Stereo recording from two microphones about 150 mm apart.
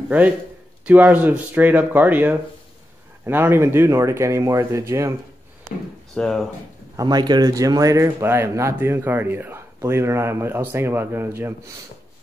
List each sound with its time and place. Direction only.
0.8 s speech: 10° right (ahead or behind)
6.1 s speech: 5° left (ahead or behind)
7.0 s speech: 25° right (ahead or behind)